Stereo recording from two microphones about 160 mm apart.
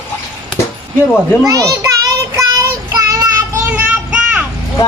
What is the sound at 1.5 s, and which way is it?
Children playing, 20° right (ahead or behind).